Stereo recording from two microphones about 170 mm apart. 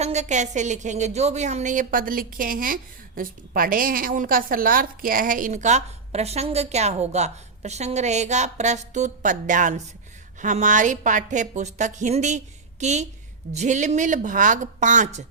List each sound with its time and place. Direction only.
0.0 s a woman's voice: 40° right (ahead or behind)